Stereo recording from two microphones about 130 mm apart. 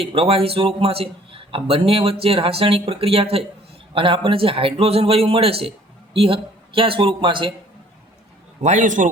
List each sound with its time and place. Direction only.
0.0 s a man's voice: 45° right (ahead or behind)
8.6 s a man's voice: 75° right (ahead or behind)